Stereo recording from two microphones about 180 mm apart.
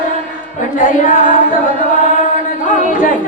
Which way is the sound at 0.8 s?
45° left (ahead or behind).